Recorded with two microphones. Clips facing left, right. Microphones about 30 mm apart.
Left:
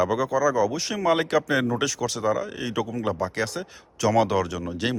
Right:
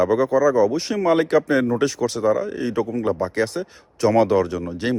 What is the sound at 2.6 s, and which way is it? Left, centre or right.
Speech, left.